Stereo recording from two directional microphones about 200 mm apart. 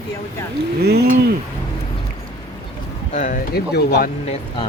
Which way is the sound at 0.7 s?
55° right (ahead or behind).